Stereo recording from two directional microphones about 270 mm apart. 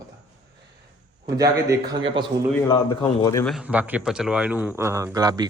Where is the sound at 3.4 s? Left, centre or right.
Centre.